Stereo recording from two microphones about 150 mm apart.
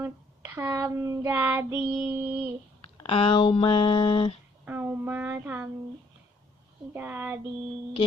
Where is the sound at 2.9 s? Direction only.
35° left (ahead or behind).